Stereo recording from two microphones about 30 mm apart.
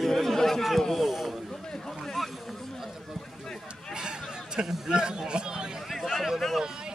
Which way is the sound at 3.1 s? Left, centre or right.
Centre.